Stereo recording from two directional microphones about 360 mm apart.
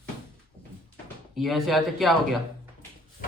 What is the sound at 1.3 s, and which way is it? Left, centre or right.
Speech, centre.